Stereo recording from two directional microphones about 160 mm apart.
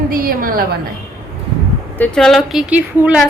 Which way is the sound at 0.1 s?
65° right (ahead or behind).